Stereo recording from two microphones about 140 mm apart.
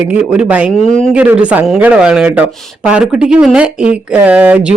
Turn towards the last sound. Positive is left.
turn(degrees=-10)  # may be behind; listen again after turning